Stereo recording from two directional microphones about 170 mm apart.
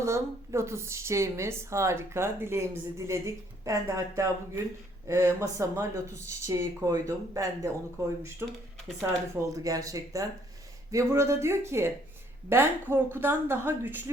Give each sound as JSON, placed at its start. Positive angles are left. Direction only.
{"t": 0.0, "sound": "speech", "side_deg": -15}